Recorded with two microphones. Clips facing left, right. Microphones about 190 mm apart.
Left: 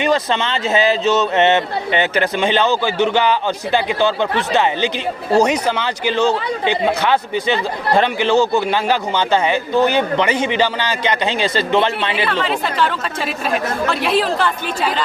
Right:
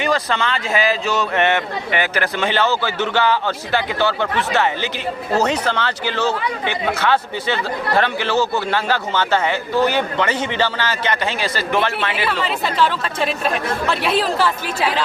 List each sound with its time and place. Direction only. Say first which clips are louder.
0.0 s speech: left 3 dB; 20° left (ahead or behind)
12.2 s speech: left 2 dB; centre (ahead or behind)